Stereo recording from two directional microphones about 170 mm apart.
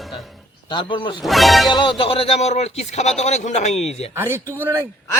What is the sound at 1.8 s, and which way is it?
Speech, 30° left (ahead or behind).